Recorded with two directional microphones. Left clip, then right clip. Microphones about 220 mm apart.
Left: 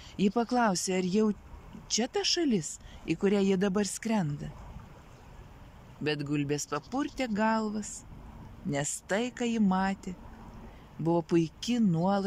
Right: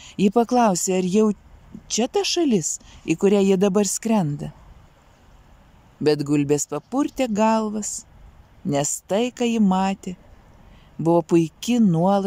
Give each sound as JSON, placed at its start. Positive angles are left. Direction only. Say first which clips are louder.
{"t": 0.0, "sound": "speech", "louder": "right 10 dB", "side_deg": -15}
{"t": 6.0, "sound": "speech", "louder": "right 12 dB", "side_deg": -20}